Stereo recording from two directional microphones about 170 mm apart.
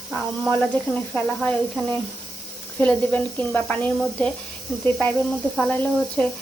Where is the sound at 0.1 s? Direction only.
Centre (ahead or behind).